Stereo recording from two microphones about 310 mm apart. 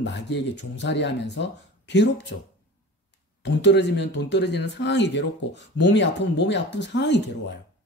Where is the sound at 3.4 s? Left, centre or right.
Left.